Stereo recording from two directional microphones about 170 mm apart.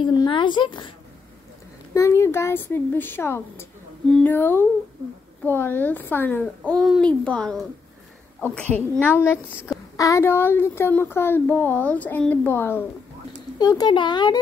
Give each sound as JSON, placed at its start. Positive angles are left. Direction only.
{"t": 0.0, "sound": "speech", "side_deg": 30}
{"t": 2.0, "sound": "speech", "side_deg": 15}
{"t": 13.6, "sound": "speech", "side_deg": 25}